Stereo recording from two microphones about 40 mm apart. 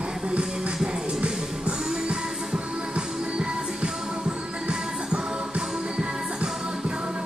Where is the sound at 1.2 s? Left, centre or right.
Right.